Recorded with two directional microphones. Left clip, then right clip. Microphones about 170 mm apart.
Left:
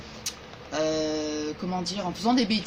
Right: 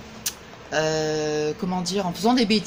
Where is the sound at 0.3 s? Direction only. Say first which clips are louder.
Right 5 dB; 65° right (ahead or behind).